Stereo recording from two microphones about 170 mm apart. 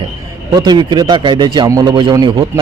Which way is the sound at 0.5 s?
25° right (ahead or behind).